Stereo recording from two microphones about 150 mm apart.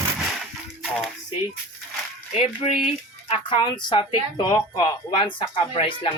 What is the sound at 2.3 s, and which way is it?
Speech, 40° left (ahead or behind).